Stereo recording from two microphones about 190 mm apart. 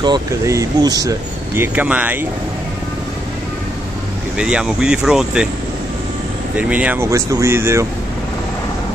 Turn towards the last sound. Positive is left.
turn(degrees=-15)  # may be behind; listen again after turning